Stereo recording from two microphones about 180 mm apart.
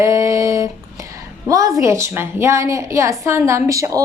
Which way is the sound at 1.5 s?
20° right (ahead or behind).